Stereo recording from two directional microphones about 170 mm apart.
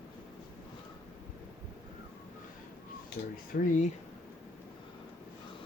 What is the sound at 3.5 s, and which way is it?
Speech, 55° left (ahead or behind).